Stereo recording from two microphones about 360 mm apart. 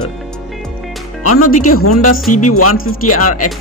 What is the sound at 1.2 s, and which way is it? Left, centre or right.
Speech, left.